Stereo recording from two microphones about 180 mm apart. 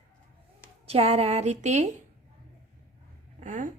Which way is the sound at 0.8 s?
35° right (ahead or behind).